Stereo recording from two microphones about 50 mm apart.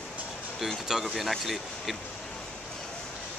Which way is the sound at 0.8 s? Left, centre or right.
Centre.